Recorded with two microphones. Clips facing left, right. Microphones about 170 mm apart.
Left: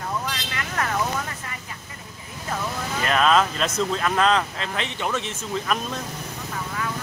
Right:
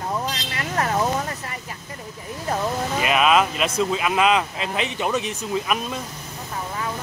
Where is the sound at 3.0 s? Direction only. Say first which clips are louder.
Right 1 dB; 10° right (ahead or behind).